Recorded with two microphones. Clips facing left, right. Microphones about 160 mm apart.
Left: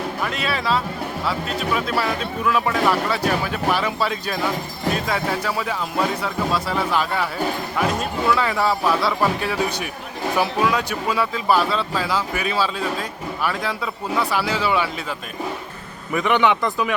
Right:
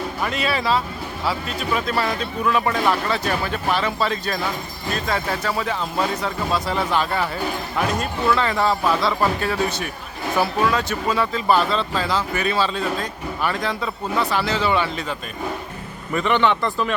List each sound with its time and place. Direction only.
0.2 s speech: centre (ahead or behind)
16.1 s speech: 10° left (ahead or behind)